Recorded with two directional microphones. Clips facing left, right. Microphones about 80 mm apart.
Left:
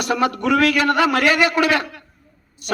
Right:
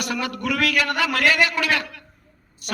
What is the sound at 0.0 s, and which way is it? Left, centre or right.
A man's voice, left.